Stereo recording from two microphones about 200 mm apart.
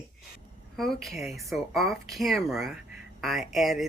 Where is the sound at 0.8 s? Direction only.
Centre (ahead or behind).